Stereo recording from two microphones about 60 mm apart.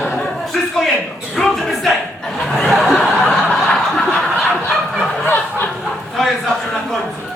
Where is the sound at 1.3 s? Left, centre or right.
Centre.